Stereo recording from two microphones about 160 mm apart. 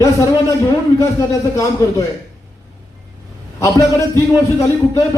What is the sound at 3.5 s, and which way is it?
Speech, 20° left (ahead or behind).